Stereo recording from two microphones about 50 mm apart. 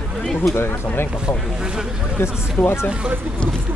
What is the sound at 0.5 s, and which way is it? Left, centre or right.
Speech, left.